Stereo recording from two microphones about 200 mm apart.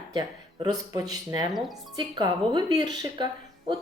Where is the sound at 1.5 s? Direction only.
Centre (ahead or behind).